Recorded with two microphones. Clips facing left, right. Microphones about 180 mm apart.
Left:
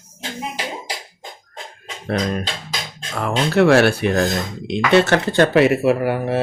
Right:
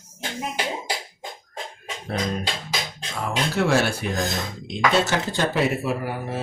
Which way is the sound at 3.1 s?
65° left (ahead or behind).